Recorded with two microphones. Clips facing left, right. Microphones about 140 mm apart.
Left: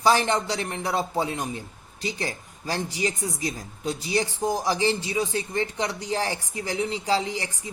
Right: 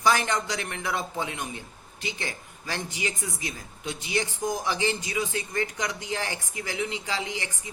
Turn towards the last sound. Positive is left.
turn(degrees=35)  # may be behind; listen again after turning